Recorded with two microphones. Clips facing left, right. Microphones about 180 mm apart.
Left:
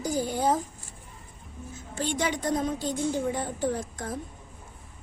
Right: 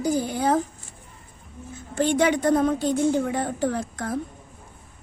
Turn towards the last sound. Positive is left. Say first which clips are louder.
# right 4 dB
turn(degrees=-70)  # may be behind; listen again after turning